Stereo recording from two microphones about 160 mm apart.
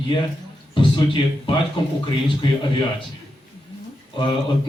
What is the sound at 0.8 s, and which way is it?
Speech, 30° left (ahead or behind).